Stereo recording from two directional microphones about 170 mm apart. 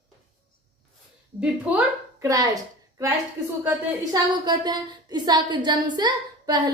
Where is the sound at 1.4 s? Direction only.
10° right (ahead or behind).